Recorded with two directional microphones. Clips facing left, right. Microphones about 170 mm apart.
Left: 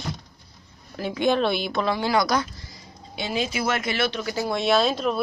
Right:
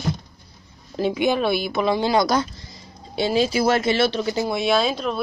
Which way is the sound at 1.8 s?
20° right (ahead or behind).